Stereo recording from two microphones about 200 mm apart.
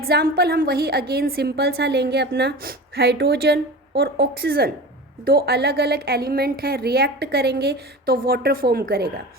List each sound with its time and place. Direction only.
0.0 s a woman's voice: 50° right (ahead or behind)